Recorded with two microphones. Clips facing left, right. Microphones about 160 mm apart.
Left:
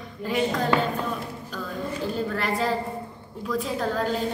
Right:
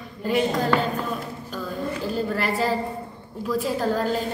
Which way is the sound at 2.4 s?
5° right (ahead or behind).